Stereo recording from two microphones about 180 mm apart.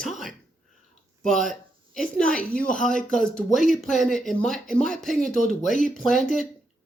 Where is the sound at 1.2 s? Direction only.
Centre (ahead or behind).